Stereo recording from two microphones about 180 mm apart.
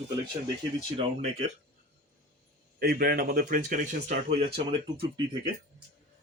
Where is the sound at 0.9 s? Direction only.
35° right (ahead or behind).